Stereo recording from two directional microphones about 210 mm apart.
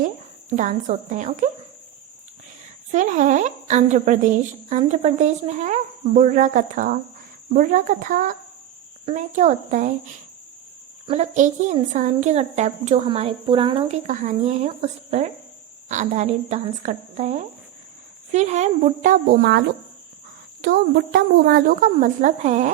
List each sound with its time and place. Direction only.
0.5 s a woman's voice: 35° right (ahead or behind)
2.9 s a woman's voice: 35° right (ahead or behind)
11.0 s a woman's voice: 30° right (ahead or behind)
14.1 s a woman's voice: 35° right (ahead or behind)
19.4 s a woman's voice: 55° right (ahead or behind); by 22.7 s 35° right (ahead or behind)